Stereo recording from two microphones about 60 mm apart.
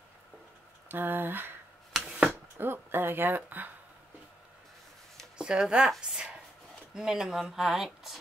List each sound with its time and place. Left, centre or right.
0.8 s speech: right
5.4 s speech: centre